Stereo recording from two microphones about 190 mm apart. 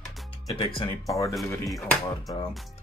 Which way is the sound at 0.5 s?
30° left (ahead or behind).